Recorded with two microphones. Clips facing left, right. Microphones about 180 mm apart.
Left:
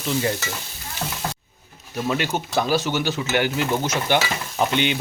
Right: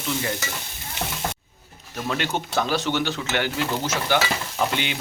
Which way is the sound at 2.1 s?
10° left (ahead or behind).